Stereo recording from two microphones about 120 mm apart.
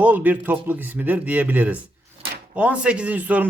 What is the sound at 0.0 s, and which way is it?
A man's voice, 15° right (ahead or behind).